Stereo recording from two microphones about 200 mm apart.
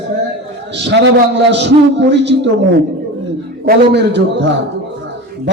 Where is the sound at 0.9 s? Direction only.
60° right (ahead or behind).